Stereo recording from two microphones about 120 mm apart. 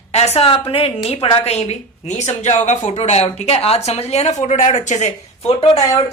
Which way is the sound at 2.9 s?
65° left (ahead or behind).